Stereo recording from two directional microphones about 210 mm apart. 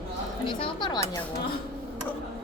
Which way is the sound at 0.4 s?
20° left (ahead or behind).